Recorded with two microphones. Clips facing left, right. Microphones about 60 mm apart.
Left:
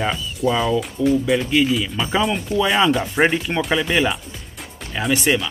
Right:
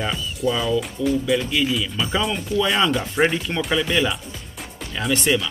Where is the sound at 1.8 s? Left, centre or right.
Centre.